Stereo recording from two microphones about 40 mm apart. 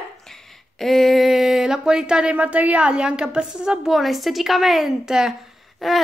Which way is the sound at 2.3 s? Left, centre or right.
Right.